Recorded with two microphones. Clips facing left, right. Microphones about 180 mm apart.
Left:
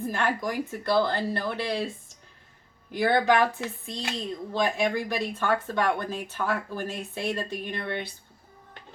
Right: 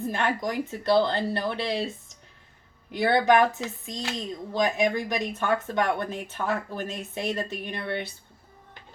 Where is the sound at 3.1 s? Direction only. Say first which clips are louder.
Right 2 dB; 20° right (ahead or behind).